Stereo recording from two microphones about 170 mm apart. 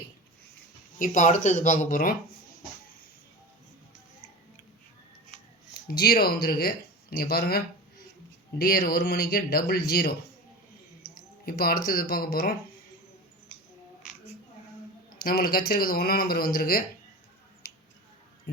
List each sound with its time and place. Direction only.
0.9 s speech: 50° left (ahead or behind)
5.9 s speech: 65° left (ahead or behind)
11.4 s speech: 60° left (ahead or behind)
15.2 s speech: 60° left (ahead or behind)
18.5 s speech: 65° left (ahead or behind)